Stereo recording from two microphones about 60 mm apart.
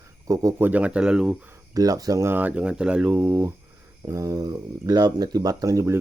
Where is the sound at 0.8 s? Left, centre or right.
Centre.